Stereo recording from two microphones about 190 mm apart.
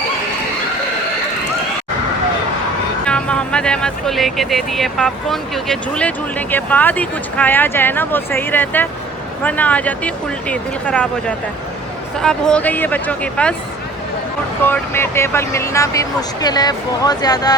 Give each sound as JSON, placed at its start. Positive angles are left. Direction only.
{"t": 3.0, "sound": "speech", "side_deg": 5}
{"t": 14.6, "sound": "speech", "side_deg": 10}